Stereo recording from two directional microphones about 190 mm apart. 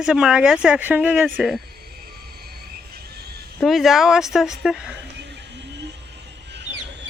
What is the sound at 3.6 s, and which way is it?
Speech, centre (ahead or behind).